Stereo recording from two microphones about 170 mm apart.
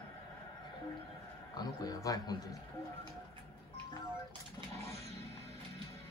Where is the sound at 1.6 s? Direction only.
20° left (ahead or behind).